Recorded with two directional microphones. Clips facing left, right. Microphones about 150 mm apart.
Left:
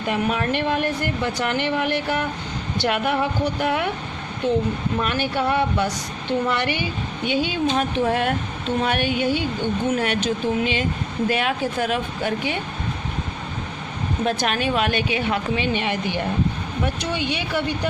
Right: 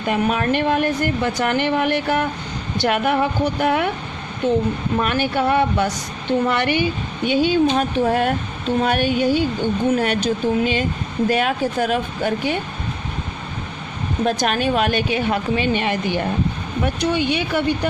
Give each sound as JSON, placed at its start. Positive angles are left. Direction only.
{"t": 0.1, "sound": "speech", "side_deg": -50}
{"t": 4.9, "sound": "a woman's voice", "side_deg": -55}
{"t": 7.3, "sound": "speech", "side_deg": -45}
{"t": 14.3, "sound": "speech", "side_deg": -45}